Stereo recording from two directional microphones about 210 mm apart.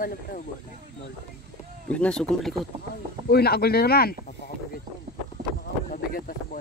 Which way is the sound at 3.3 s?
50° left (ahead or behind).